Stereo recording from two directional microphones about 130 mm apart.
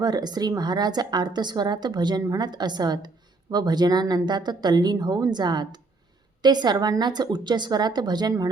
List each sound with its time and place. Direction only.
0.0 s speech: 30° right (ahead or behind)